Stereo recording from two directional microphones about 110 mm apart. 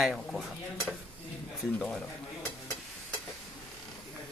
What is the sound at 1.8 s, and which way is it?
Speech, 5° left (ahead or behind).